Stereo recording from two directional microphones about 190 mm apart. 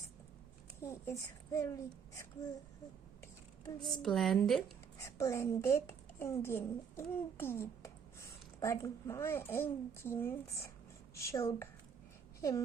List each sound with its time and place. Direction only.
0.8 s a child's voice: 15° left (ahead or behind)
3.8 s a woman's voice: centre (ahead or behind)
4.9 s a child's voice: 15° left (ahead or behind)